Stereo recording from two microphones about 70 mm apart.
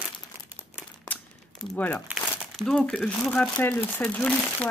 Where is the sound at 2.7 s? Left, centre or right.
Centre.